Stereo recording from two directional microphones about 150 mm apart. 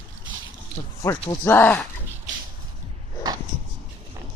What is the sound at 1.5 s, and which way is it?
Speech, 10° left (ahead or behind).